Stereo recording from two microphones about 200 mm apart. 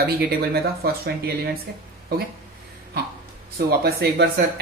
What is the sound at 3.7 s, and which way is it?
Speech, 50° right (ahead or behind).